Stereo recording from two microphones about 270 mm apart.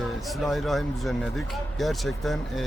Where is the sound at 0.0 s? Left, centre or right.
Centre.